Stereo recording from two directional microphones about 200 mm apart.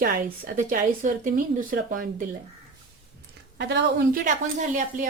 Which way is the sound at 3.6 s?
60° right (ahead or behind).